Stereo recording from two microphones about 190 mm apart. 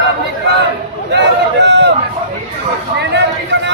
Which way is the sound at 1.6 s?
65° right (ahead or behind).